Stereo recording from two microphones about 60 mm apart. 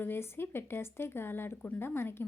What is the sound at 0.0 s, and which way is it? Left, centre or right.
Speech, left.